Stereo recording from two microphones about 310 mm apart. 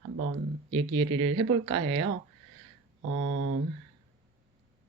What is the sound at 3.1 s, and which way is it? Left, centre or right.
Speech, right.